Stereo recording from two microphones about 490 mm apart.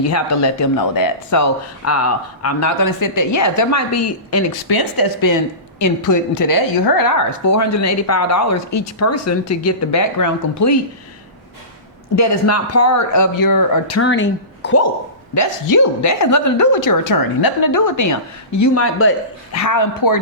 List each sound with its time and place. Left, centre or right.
0.0 s a woman's voice: left
4.7 s a woman's voice: left
12.1 s a woman's voice: left
15.4 s a woman's voice: left